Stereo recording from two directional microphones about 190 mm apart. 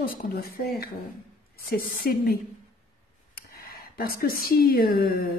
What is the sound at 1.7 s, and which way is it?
Speech, 50° left (ahead or behind).